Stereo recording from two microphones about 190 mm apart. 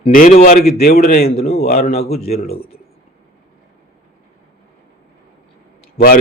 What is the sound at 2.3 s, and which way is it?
Speech, 55° left (ahead or behind).